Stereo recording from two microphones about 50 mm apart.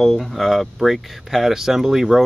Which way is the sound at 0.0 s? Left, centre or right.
Centre.